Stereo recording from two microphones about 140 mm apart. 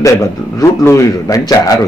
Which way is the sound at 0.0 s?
25° left (ahead or behind).